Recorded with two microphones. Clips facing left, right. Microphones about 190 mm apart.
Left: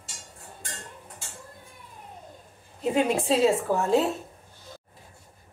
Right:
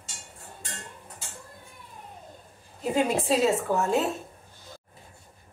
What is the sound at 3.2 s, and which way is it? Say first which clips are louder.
Speech: left 2 dB; 30° left (ahead or behind).